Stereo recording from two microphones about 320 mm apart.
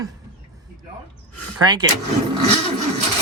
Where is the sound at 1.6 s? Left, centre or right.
Centre.